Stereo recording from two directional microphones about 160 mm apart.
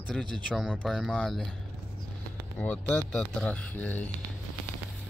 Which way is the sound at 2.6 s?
10° left (ahead or behind).